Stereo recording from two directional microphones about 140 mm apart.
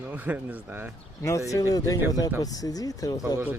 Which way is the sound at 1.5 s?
25° left (ahead or behind).